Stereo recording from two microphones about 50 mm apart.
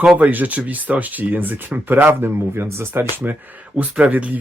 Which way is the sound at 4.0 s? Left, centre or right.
Right.